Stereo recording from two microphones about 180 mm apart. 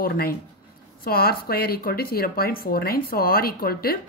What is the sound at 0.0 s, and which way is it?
A woman's voice, 55° left (ahead or behind).